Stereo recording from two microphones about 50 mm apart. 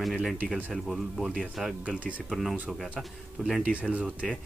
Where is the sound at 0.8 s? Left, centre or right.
Centre.